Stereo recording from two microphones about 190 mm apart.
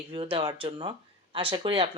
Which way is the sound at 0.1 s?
25° right (ahead or behind).